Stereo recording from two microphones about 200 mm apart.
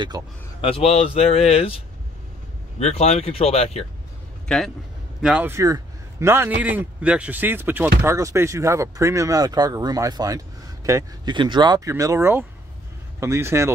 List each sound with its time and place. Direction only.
0.1 s a man's voice: 20° right (ahead or behind)
0.6 s speech: 30° left (ahead or behind)
2.8 s speech: 30° left (ahead or behind)
4.5 s speech: centre (ahead or behind)